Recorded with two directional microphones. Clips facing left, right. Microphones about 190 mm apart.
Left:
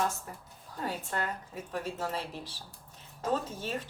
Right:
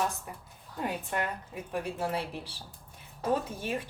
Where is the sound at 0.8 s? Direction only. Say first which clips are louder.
Right 2 dB; 15° right (ahead or behind).